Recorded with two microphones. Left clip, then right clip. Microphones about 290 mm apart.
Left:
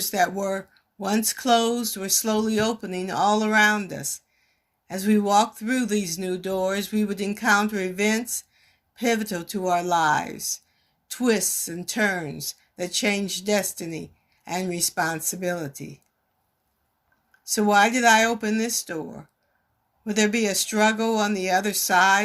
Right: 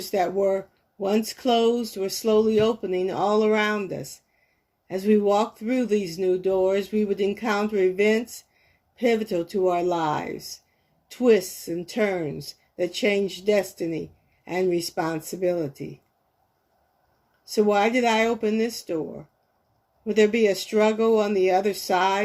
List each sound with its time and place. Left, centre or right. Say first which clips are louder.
0.0 s speech: right 1 dB; left
17.4 s speech: left 2 dB; left
20.1 s speech: right 4 dB; left